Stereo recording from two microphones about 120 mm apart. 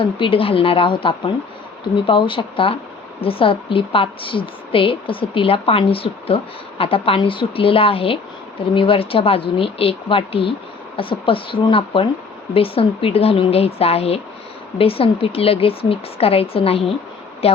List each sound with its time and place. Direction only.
0.0 s a woman's voice: 50° left (ahead or behind)